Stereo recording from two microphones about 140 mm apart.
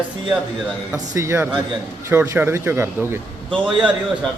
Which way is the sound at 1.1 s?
20° right (ahead or behind).